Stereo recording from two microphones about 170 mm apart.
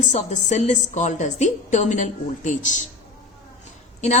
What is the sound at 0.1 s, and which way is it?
A woman's voice, 45° left (ahead or behind).